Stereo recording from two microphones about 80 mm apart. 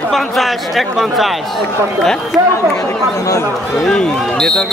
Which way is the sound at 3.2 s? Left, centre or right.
Left.